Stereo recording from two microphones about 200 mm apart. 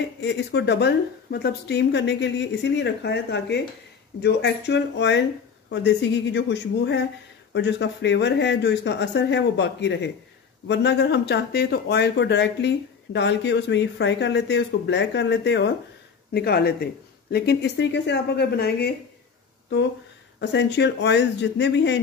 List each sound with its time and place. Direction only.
0.2 s speech: 60° left (ahead or behind)
20.3 s speech: 60° left (ahead or behind)